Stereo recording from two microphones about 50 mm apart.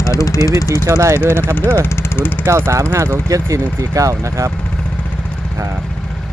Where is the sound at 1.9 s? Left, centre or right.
Left.